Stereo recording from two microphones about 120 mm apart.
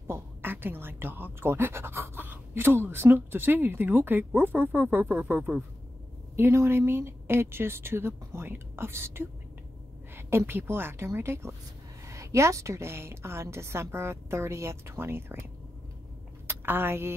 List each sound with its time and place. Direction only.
0.0 s a woman's voice: 20° right (ahead or behind)
16.4 s speech: 20° right (ahead or behind)